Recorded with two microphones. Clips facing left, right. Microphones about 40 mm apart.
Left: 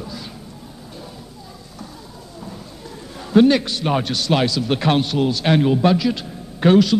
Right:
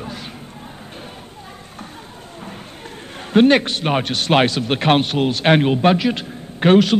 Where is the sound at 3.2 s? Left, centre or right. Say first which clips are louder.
Right 1 dB; right.